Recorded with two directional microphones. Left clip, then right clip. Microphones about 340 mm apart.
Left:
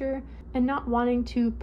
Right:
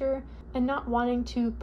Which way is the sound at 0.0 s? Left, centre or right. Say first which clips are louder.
Right 2 dB; centre.